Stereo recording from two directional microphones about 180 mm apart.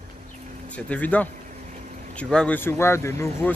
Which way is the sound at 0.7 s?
5° left (ahead or behind).